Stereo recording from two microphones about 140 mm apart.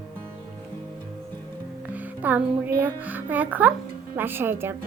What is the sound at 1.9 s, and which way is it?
Music, 10° right (ahead or behind).